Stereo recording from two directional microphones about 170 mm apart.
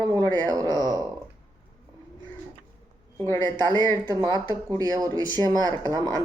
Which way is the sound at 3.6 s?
20° right (ahead or behind).